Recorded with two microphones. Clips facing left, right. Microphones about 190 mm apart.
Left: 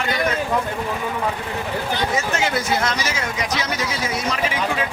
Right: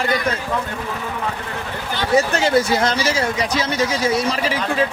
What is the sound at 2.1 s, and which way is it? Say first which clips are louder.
Speech: right 6 dB; 35° right (ahead or behind).